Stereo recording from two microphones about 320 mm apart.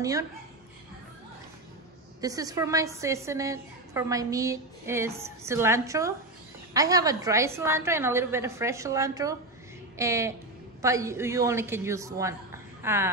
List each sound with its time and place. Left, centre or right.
2.2 s a woman's voice: centre